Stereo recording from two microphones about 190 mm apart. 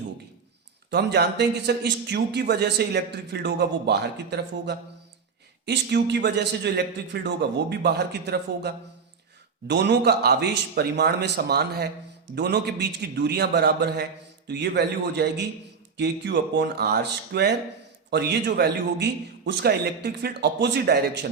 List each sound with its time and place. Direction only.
0.9 s a man's voice: 60° right (ahead or behind)